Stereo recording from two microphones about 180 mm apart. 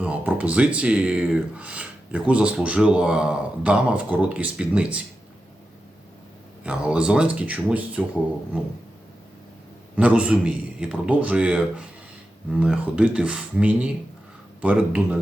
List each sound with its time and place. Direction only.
0.0 s speech: 5° right (ahead or behind)
6.7 s speech: 5° right (ahead or behind)
10.0 s speech: 5° right (ahead or behind)